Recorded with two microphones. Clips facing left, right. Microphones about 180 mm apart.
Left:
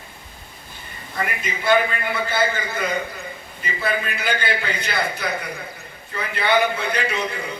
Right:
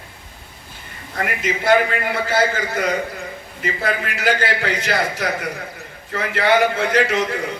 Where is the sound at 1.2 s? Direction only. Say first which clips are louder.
Right 4 dB; 90° right.